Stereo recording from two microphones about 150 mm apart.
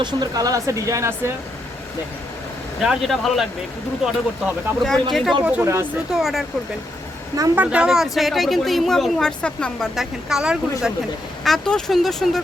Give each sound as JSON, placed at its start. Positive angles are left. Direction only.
{"t": 0.0, "sound": "speech", "side_deg": -30}
{"t": 2.8, "sound": "speech", "side_deg": 0}
{"t": 6.1, "sound": "speech", "side_deg": 0}
{"t": 7.3, "sound": "speech", "side_deg": -25}
{"t": 7.6, "sound": "speech", "side_deg": -10}